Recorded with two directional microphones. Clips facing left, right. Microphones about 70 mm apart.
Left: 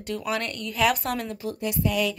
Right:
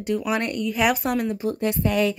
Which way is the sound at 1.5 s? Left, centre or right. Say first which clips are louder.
Right 1 dB; right.